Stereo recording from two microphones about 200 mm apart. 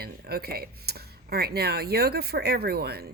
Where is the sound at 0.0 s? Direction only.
50° right (ahead or behind).